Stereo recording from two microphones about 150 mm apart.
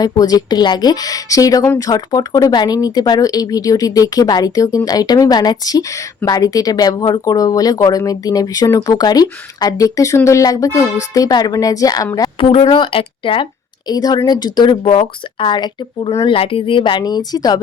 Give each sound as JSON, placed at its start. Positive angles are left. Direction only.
{"t": 0.0, "sound": "speech", "side_deg": 25}
{"t": 12.4, "sound": "a woman's voice", "side_deg": 35}